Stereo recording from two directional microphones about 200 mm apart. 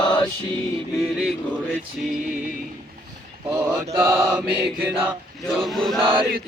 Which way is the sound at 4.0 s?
5° right (ahead or behind).